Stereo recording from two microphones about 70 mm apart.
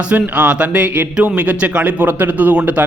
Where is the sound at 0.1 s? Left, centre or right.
Centre.